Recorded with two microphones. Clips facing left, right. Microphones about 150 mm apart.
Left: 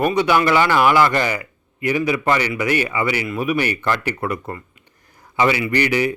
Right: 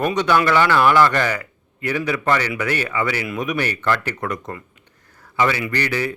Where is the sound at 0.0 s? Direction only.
10° left (ahead or behind).